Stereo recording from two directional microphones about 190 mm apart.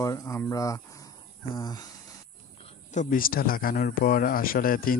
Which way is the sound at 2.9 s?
45° left (ahead or behind).